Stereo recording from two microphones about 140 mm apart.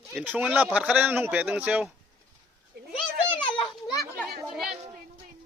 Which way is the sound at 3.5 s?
25° left (ahead or behind).